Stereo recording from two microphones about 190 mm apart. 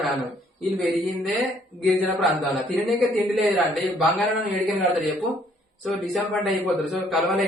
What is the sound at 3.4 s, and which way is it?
Speech, centre (ahead or behind).